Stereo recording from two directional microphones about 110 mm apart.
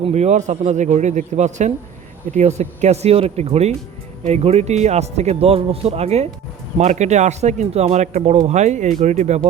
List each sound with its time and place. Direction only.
0.0 s a man's voice: 90° right; by 6.2 s 70° right (ahead or behind)
6.7 s a man's voice: 90° right